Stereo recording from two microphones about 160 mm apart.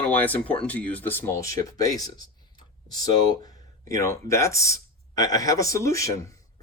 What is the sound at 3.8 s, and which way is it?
Speech, 20° left (ahead or behind).